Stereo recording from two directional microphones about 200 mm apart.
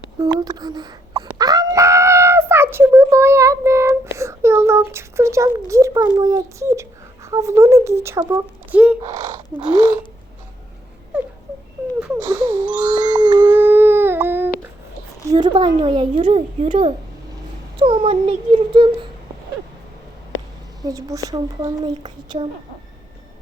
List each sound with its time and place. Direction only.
0.2 s a sound: 20° right (ahead or behind)
7.3 s a child's voice: 15° right (ahead or behind)
12.3 s speech: 20° right (ahead or behind)
13.0 s a sound: 20° right (ahead or behind)
15.3 s speech: 20° right (ahead or behind)
20.8 s speech: 15° right (ahead or behind)